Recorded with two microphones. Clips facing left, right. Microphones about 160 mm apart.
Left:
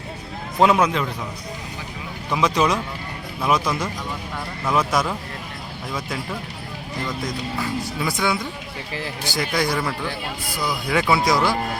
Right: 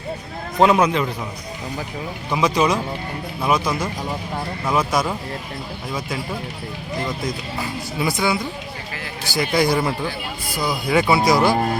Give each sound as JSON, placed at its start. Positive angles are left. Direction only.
{"t": 0.6, "sound": "speech", "side_deg": 0}
{"t": 2.3, "sound": "speech", "side_deg": -5}
{"t": 7.6, "sound": "speech", "side_deg": -10}
{"t": 9.6, "sound": "speech", "side_deg": -15}